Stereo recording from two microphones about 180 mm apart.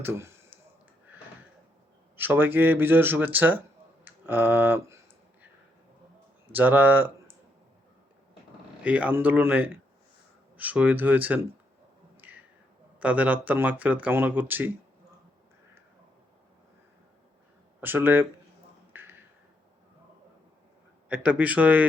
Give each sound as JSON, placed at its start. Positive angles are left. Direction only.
{"t": 0.0, "sound": "a sound", "side_deg": -10}
{"t": 2.1, "sound": "speech", "side_deg": -10}
{"t": 6.5, "sound": "speech", "side_deg": -10}
{"t": 8.8, "sound": "speech", "side_deg": -10}
{"t": 12.1, "sound": "a sound", "side_deg": -10}
{"t": 13.0, "sound": "speech", "side_deg": -10}
{"t": 17.7, "sound": "speech", "side_deg": -10}
{"t": 18.9, "sound": "a sound", "side_deg": -10}
{"t": 21.1, "sound": "speech", "side_deg": -10}